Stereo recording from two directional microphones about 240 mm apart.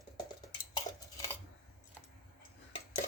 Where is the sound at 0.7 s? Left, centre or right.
Centre.